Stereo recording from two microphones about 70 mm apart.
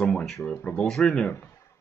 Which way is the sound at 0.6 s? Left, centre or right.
Centre.